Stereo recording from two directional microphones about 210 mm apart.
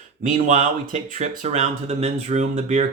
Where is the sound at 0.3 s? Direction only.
35° right (ahead or behind).